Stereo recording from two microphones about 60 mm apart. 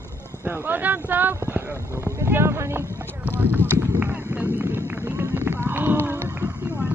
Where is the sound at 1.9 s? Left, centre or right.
Right.